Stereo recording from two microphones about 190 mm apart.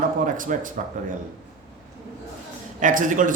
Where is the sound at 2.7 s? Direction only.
45° right (ahead or behind).